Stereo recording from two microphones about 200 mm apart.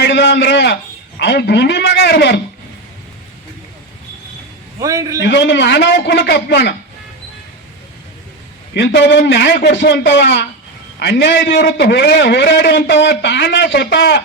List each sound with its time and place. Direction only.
0.0 s a man's voice: 60° left (ahead or behind)
4.8 s a man's voice: 15° right (ahead or behind)
5.2 s a man's voice: 60° left (ahead or behind)
8.7 s a man's voice: 60° left (ahead or behind)